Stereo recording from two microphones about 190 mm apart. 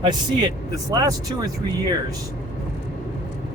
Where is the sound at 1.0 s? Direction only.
20° right (ahead or behind).